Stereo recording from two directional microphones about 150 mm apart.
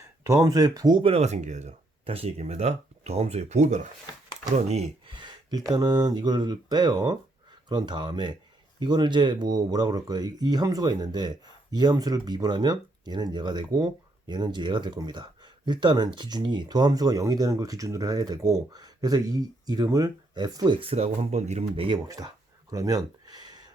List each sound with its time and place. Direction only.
0.3 s speech: 20° right (ahead or behind)
1.1 s speech: 50° right (ahead or behind)
5.1 s a sound: 30° right (ahead or behind)
5.7 s speech: 25° right (ahead or behind)